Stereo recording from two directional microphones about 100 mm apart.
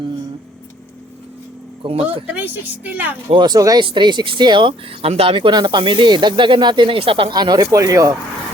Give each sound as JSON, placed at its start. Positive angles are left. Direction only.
{"t": 1.8, "sound": "speech", "side_deg": -65}
{"t": 2.2, "sound": "a woman's voice", "side_deg": -20}
{"t": 3.2, "sound": "speech", "side_deg": -50}
{"t": 3.8, "sound": "speech", "side_deg": -50}
{"t": 5.0, "sound": "speech", "side_deg": -75}